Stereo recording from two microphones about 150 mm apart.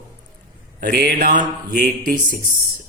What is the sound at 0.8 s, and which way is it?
Speech, 80° right.